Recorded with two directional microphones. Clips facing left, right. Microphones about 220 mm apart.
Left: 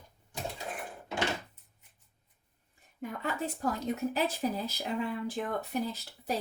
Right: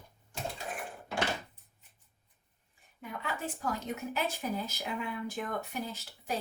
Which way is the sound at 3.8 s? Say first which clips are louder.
Left 4 dB; 35° left (ahead or behind).